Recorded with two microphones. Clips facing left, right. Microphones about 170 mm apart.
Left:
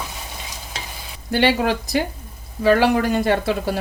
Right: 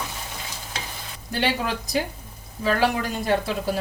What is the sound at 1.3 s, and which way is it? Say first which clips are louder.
Speech: left 7 dB; 70° left (ahead or behind).